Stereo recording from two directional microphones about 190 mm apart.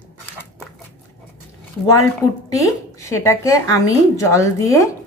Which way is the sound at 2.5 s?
15° left (ahead or behind).